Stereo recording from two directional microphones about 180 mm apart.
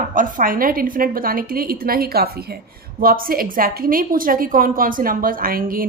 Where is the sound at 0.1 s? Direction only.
50° right (ahead or behind).